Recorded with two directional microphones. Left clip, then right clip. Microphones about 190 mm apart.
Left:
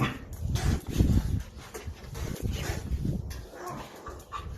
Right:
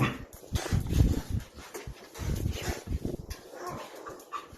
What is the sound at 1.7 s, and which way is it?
Dog, 10° left (ahead or behind).